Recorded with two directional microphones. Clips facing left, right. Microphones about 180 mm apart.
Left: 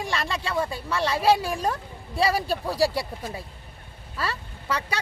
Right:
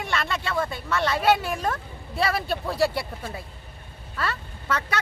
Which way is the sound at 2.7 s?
35° left (ahead or behind).